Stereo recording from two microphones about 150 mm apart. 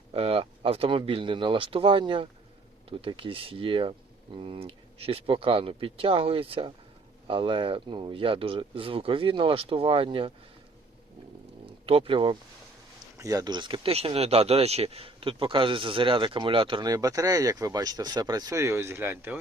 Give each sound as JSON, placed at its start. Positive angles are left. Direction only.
{"t": 0.1, "sound": "speech", "side_deg": -40}
{"t": 11.9, "sound": "speech", "side_deg": -40}
{"t": 13.1, "sound": "speech", "side_deg": -25}